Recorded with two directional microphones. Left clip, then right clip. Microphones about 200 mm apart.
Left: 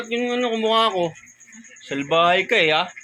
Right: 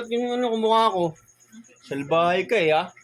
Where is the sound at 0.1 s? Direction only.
5° right (ahead or behind).